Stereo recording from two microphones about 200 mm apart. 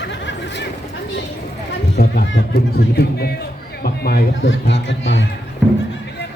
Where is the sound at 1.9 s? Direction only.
50° left (ahead or behind).